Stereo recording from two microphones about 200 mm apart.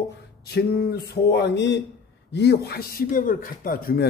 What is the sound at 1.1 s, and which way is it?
A man's voice, 60° left (ahead or behind).